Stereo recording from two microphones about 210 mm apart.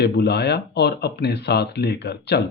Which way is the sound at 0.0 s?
50° left (ahead or behind).